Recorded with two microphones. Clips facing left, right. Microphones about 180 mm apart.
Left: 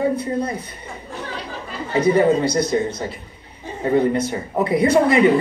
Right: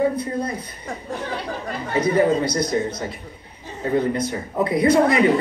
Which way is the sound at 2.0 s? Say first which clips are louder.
Left 3 dB; 30° left (ahead or behind).